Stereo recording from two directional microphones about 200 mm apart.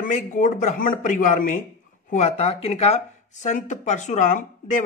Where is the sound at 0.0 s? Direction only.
40° left (ahead or behind).